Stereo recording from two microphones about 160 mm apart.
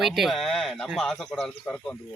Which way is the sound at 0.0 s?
Centre (ahead or behind).